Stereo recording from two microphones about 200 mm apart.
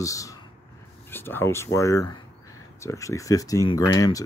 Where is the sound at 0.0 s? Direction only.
15° left (ahead or behind).